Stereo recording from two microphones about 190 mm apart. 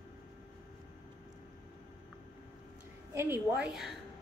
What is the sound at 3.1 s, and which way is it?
Speech, 10° right (ahead or behind).